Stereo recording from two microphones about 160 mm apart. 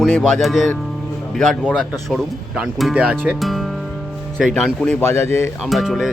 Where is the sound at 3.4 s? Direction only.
Centre (ahead or behind).